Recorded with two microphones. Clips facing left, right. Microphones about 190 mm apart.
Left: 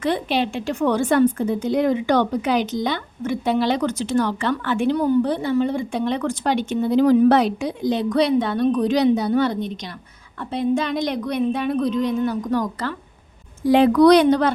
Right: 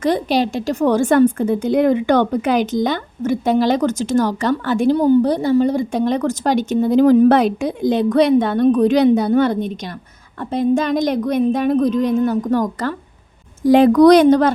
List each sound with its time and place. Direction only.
0.0 s a woman's voice: 40° right (ahead or behind)